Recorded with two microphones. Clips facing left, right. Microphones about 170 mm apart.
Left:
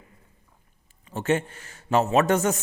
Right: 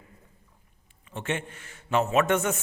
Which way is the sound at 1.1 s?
40° left (ahead or behind).